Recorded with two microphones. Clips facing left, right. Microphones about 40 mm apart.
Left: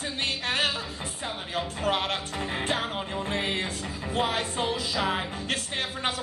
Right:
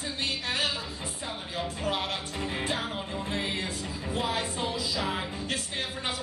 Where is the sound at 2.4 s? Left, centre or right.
Left.